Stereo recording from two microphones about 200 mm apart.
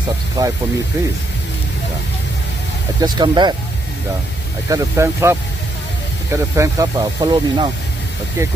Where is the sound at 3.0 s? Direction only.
20° right (ahead or behind).